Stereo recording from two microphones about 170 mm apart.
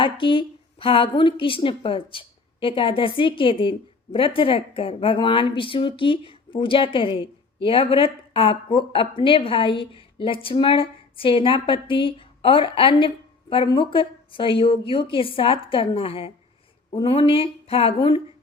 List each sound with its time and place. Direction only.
0.0 s a woman's voice: 30° left (ahead or behind)